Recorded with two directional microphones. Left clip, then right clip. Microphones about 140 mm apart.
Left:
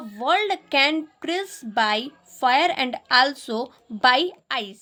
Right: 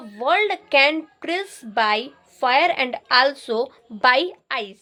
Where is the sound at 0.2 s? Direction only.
30° left (ahead or behind).